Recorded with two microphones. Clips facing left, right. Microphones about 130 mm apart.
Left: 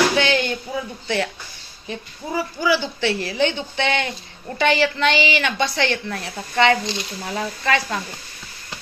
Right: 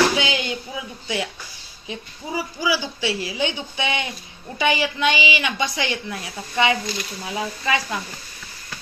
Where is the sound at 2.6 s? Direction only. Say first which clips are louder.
Left 4 dB; 10° right (ahead or behind).